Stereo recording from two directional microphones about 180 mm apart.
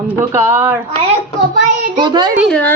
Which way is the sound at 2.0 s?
25° right (ahead or behind).